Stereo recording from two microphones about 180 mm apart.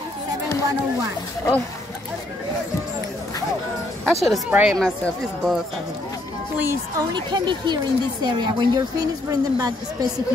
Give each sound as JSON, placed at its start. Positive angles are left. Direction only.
{"t": 4.0, "sound": "speech", "side_deg": 0}
{"t": 6.6, "sound": "speech", "side_deg": -15}